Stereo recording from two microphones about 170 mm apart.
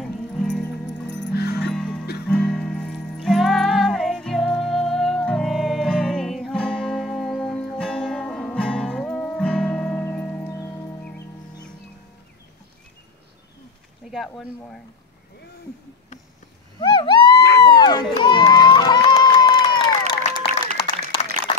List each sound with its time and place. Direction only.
0.0 s music: 5° left (ahead or behind)
1.0 s music: 90° left; by 1.6 s 70° left (ahead or behind)
1.6 s music: 5° left (ahead or behind)
14.1 s speech: centre (ahead or behind)
16.8 s a sound: 30° left (ahead or behind)
17.4 s a sound: 80° left
17.6 s run: 25° left (ahead or behind)
18.1 s crowd: 25° left (ahead or behind)
21.5 s a sound: 35° left (ahead or behind)